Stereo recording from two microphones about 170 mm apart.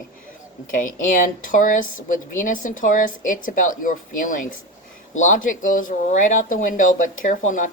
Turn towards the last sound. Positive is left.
turn(degrees=45)  # may be behind; listen again after turning